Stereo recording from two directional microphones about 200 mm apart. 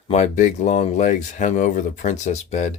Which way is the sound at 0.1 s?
35° left (ahead or behind).